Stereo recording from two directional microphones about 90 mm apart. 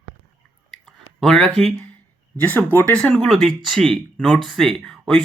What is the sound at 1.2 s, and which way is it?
Speech, 5° left (ahead or behind).